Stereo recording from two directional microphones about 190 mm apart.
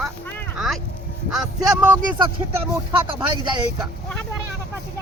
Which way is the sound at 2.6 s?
25° right (ahead or behind).